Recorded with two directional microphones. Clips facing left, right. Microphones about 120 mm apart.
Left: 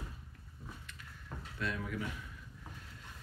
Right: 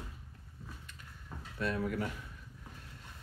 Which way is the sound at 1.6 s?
35° right (ahead or behind).